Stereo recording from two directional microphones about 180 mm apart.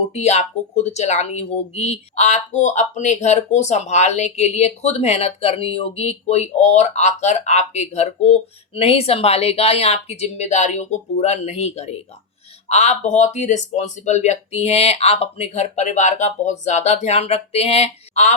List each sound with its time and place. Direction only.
0.1 s speech: 35° left (ahead or behind)